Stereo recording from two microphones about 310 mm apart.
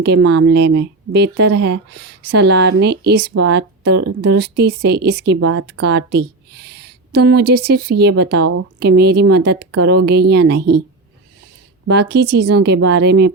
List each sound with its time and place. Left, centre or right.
0.0 s speech: right
11.9 s speech: right